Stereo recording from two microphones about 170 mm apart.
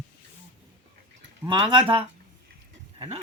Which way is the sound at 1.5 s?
30° right (ahead or behind).